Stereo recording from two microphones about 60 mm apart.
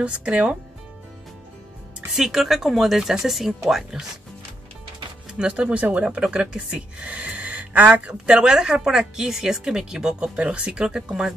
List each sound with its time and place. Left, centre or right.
0.0 s speech: centre
2.1 s speech: centre
5.4 s speech: centre